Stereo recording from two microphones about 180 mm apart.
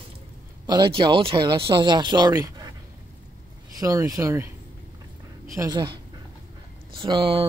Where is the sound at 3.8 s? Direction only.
20° right (ahead or behind).